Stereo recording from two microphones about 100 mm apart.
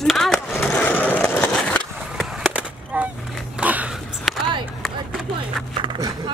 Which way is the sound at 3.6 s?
15° right (ahead or behind).